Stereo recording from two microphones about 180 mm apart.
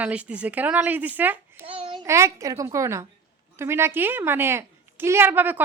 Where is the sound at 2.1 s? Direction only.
15° right (ahead or behind).